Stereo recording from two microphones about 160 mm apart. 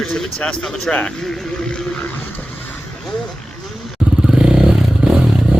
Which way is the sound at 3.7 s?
Centre (ahead or behind).